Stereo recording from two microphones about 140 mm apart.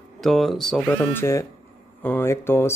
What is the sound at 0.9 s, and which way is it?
Speech, 20° left (ahead or behind).